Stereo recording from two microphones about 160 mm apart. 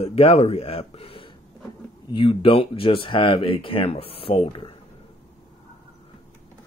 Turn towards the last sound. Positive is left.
turn(degrees=35)  # may be behind; listen again after turning